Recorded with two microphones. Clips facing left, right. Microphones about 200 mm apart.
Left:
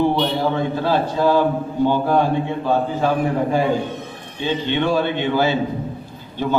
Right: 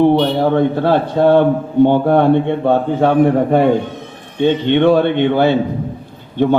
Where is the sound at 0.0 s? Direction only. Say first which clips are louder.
Right 6 dB; 60° right (ahead or behind).